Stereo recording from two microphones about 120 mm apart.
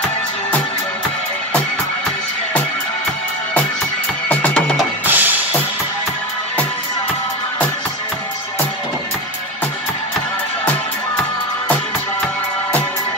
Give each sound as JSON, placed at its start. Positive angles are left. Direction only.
{"t": 4.3, "sound": "music", "side_deg": 10}
{"t": 5.0, "sound": "music", "side_deg": -15}